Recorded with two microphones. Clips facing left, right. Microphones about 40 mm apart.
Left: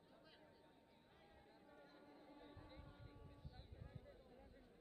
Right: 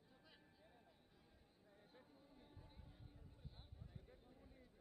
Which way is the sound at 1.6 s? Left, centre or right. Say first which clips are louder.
Left 2 dB; left.